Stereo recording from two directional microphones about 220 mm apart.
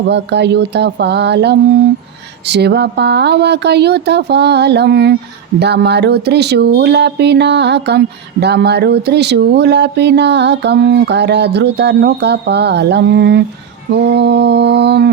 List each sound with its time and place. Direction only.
0.1 s speech: 50° right (ahead or behind)